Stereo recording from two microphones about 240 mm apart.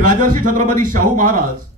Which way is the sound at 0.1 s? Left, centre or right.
Right.